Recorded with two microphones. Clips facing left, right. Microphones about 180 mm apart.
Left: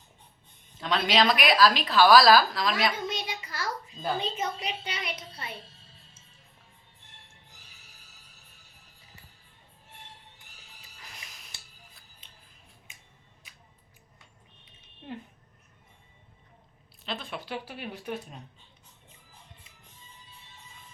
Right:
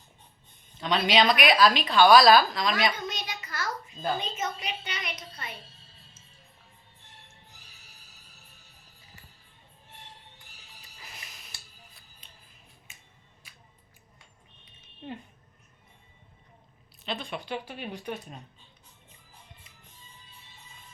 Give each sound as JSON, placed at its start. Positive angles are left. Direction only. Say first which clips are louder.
{"t": 0.8, "sound": "a woman's voice", "louder": "right 1 dB", "side_deg": 0}
{"t": 3.1, "sound": "child singing", "louder": "left 2 dB", "side_deg": 30}
{"t": 4.2, "sound": "a woman's voice", "louder": "left 2 dB", "side_deg": 30}
{"t": 10.9, "sound": "a sound", "louder": "right 1 dB", "side_deg": -5}
{"t": 12.2, "sound": "scissors", "louder": "right 2 dB", "side_deg": 20}
{"t": 17.0, "sound": "a woman's voice", "louder": "right 2 dB", "side_deg": 0}